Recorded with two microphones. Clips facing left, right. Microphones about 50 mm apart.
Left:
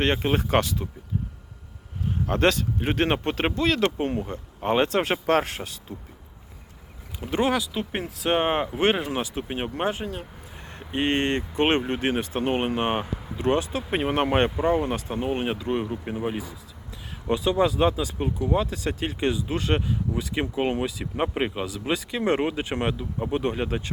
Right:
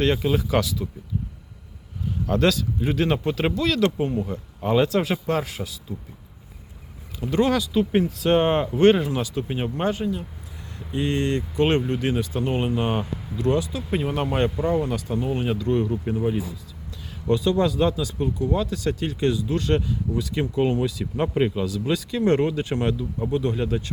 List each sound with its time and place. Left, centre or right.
0.0 s speech: left
2.2 s speech: left
5.2 s speech: left
7.2 s speech: left
7.5 s speech: centre
9.1 s speech: left
10.8 s speech: left